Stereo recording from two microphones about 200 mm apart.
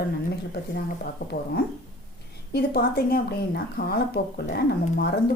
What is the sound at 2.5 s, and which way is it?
Speech, 50° left (ahead or behind).